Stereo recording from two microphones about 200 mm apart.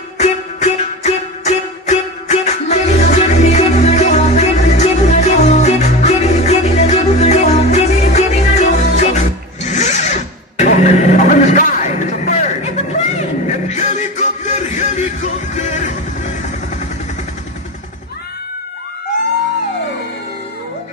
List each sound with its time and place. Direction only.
0.2 s music: 35° left (ahead or behind)
13.7 s music: 35° left (ahead or behind)